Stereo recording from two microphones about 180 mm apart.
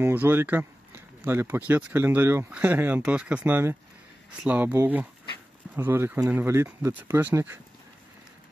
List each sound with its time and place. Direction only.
0.0 s speech: 10° right (ahead or behind)